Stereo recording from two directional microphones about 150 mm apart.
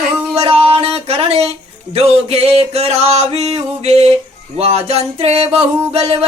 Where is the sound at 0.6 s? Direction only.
40° right (ahead or behind).